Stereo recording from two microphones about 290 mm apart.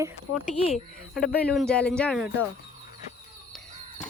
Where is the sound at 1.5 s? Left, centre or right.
Centre.